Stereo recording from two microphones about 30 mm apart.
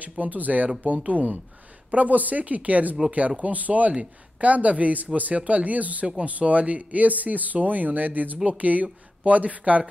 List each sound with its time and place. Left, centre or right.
0.2 s speech: right
3.1 s speech: right
8.5 s speech: right